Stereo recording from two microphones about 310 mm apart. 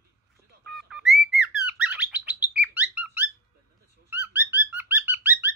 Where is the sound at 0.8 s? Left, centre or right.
Centre.